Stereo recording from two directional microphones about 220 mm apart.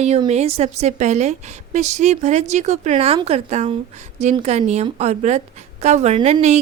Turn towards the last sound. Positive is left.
turn(degrees=-30)  # may be behind; listen again after turning